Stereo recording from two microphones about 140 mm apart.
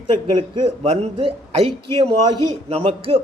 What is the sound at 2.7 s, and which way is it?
Speech, 45° right (ahead or behind).